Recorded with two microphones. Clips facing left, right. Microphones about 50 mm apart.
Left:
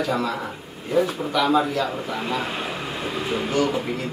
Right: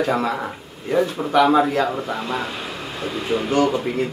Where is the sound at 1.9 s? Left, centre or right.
Centre.